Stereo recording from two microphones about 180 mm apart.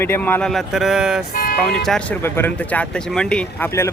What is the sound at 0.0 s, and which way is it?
Speech, 10° left (ahead or behind).